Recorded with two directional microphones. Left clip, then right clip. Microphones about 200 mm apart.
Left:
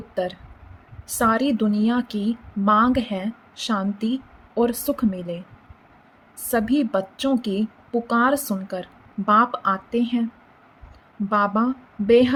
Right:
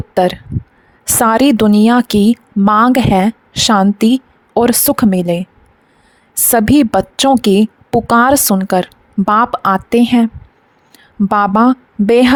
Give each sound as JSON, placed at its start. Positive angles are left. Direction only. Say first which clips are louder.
{"t": 0.1, "sound": "a woman's voice", "louder": "right 14 dB", "side_deg": -60}
{"t": 6.5, "sound": "a woman's voice", "louder": "right 11 dB", "side_deg": -60}
{"t": 11.3, "sound": "a woman's voice", "louder": "right 10 dB", "side_deg": -60}